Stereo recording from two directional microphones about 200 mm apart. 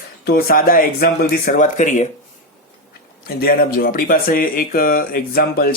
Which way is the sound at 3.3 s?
50° left (ahead or behind).